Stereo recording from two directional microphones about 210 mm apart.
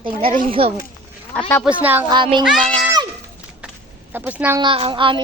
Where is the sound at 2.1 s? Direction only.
20° right (ahead or behind).